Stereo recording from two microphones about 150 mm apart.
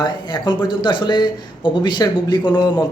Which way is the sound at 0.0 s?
30° left (ahead or behind).